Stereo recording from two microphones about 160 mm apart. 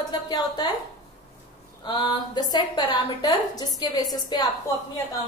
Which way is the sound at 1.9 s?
30° left (ahead or behind).